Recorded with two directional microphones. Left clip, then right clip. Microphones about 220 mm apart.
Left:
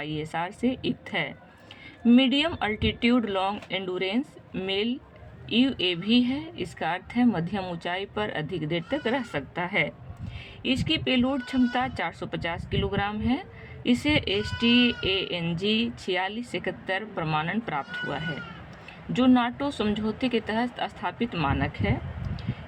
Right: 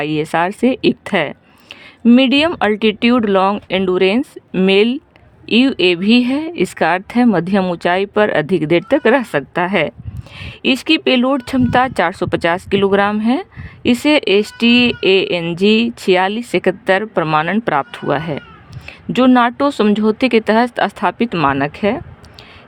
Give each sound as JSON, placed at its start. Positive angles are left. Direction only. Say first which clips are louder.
{"t": 0.0, "sound": "speech", "louder": "right 15 dB", "side_deg": -50}